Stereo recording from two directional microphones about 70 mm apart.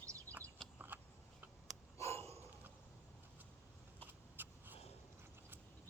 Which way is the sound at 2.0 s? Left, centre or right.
Left.